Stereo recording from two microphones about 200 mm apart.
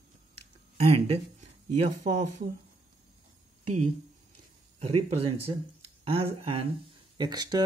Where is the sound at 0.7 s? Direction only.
30° right (ahead or behind).